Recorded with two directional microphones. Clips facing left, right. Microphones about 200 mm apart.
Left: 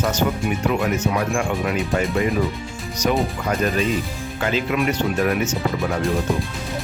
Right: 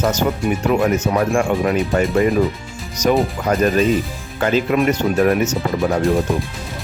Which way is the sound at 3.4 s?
45° right (ahead or behind).